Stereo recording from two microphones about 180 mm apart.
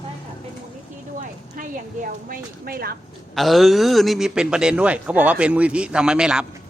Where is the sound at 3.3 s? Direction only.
Centre (ahead or behind).